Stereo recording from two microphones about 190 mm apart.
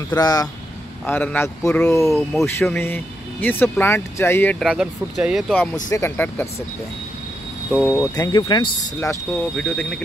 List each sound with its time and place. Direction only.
0.1 s speech: 20° left (ahead or behind)
2.0 s speech: centre (ahead or behind)
5.9 s speech: 15° left (ahead or behind)
7.9 s speech: 15° left (ahead or behind)